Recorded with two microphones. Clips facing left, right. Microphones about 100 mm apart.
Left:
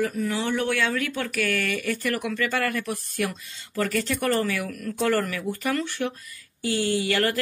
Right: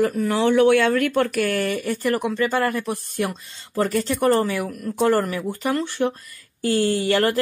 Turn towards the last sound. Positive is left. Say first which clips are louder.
# right 4 dB
turn(degrees=-30)  # may be behind; listen again after turning